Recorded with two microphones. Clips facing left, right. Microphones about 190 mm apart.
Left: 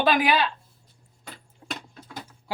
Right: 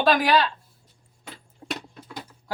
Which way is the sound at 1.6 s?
25° right (ahead or behind).